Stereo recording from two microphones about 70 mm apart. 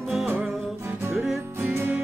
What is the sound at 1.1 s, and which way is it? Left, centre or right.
Music, centre.